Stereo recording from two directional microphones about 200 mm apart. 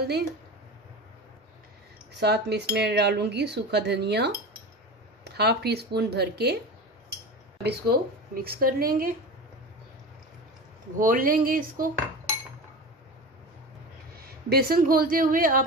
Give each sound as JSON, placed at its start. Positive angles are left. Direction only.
{"t": 2.1, "sound": "a woman's voice", "side_deg": -55}
{"t": 7.6, "sound": "a woman's voice", "side_deg": -50}
{"t": 11.0, "sound": "a woman's voice", "side_deg": -45}
{"t": 14.1, "sound": "speech", "side_deg": -50}